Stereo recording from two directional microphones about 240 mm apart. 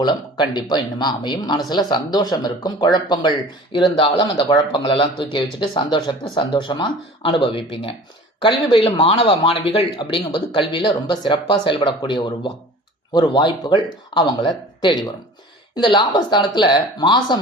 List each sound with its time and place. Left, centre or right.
0.0 s speech: centre